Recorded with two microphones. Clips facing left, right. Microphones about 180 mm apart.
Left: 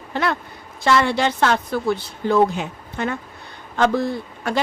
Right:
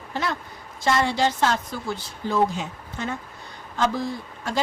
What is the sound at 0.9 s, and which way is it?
A woman's voice, 65° left (ahead or behind).